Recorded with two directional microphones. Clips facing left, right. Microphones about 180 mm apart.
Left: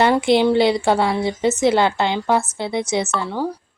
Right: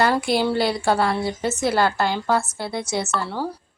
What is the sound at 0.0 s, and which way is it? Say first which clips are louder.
Speech: left 5 dB; 20° left (ahead or behind).